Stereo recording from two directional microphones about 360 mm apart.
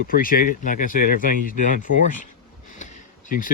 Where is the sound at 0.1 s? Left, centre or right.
Left.